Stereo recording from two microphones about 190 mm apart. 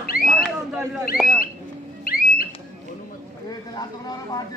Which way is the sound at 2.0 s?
50° left (ahead or behind).